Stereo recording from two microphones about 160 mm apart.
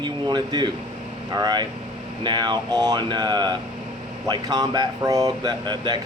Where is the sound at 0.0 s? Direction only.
30° right (ahead or behind).